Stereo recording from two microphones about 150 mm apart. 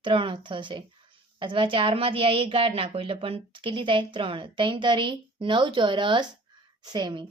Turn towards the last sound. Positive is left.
turn(degrees=-30)  # may be behind; listen again after turning